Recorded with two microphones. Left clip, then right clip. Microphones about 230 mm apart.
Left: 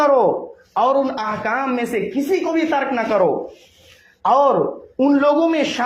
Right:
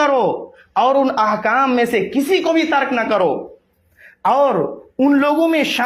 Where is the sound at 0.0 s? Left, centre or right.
Right.